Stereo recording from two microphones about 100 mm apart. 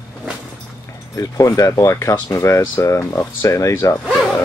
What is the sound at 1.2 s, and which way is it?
Speech, 35° left (ahead or behind).